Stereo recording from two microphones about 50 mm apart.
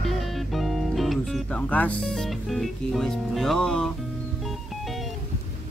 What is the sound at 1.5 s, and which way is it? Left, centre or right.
Speech, left.